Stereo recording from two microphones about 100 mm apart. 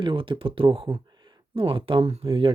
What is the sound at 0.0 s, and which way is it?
Speech, 60° right (ahead or behind).